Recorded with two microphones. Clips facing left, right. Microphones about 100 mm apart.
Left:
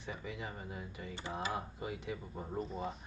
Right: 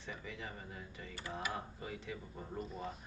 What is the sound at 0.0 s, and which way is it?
Speech, 15° left (ahead or behind).